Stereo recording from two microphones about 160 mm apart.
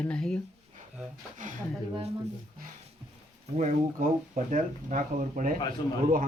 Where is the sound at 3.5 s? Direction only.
50° right (ahead or behind).